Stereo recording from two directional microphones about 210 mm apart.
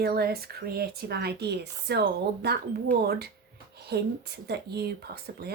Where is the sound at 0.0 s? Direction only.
45° right (ahead or behind).